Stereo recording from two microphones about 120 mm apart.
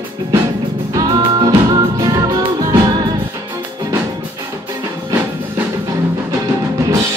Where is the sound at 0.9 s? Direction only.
30° right (ahead or behind).